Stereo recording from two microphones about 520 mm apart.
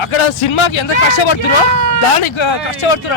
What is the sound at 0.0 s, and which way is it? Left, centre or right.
Speech, left.